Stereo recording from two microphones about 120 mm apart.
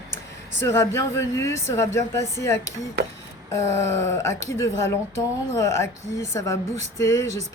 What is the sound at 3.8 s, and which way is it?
Speech, 25° left (ahead or behind).